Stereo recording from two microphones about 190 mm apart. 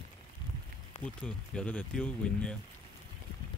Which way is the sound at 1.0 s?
5° left (ahead or behind).